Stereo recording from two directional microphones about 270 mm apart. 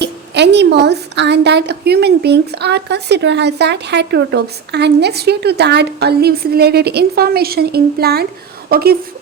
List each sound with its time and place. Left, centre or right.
0.0 s a woman's voice: right